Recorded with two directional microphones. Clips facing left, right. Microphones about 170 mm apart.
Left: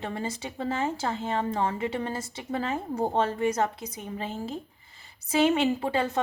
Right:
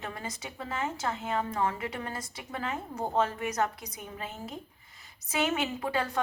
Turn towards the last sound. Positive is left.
turn(degrees=25)  # may be behind; listen again after turning